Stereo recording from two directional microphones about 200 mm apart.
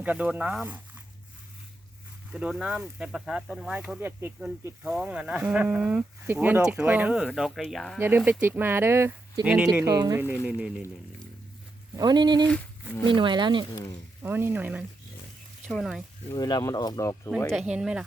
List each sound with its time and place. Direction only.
0.0 s speech: 5° right (ahead or behind)
2.3 s speech: 5° right (ahead or behind)
7.9 s speech: 10° right (ahead or behind)
9.4 s speech: centre (ahead or behind)
11.9 s speech: 20° right (ahead or behind)
14.2 s speech: 10° right (ahead or behind)
16.3 s speech: 20° left (ahead or behind)
17.3 s speech: centre (ahead or behind)